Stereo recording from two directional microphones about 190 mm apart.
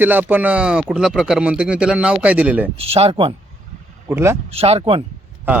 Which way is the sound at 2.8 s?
30° right (ahead or behind).